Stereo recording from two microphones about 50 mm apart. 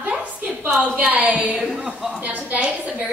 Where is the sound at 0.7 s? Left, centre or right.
Right.